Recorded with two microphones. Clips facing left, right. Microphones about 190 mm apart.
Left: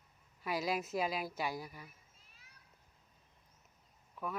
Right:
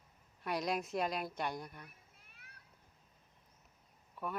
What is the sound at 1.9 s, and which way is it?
Cat, 60° right (ahead or behind).